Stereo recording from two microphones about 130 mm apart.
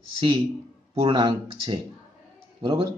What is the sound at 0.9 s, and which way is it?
Speech, 35° right (ahead or behind).